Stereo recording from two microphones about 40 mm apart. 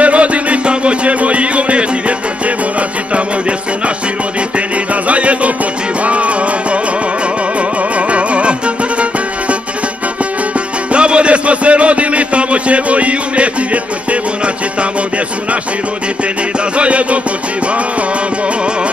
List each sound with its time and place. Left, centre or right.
0.0 s music: right
5.0 s music: right
8.1 s music: right
10.9 s music: right
16.7 s music: right